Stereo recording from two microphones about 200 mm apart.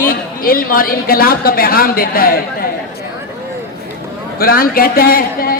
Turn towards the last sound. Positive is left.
turn(degrees=45)  # may be behind; listen again after turning